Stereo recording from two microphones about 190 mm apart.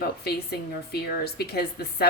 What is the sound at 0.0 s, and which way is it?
Speech, 55° left (ahead or behind).